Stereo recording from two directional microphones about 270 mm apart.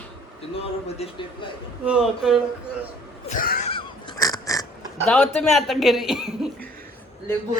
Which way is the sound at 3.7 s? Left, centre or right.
Centre.